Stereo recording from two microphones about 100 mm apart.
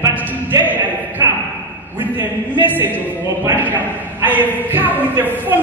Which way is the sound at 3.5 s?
20° right (ahead or behind).